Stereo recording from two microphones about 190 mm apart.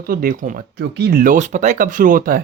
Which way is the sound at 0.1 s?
50° right (ahead or behind).